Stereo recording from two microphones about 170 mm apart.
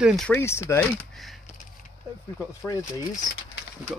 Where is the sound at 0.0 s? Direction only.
Centre (ahead or behind).